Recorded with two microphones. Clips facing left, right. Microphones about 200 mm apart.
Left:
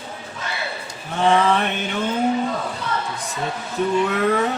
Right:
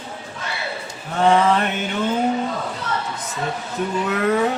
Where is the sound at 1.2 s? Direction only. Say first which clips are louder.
Right 1 dB; 5° right (ahead or behind).